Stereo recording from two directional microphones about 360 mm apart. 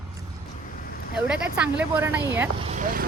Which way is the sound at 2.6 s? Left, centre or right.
Right.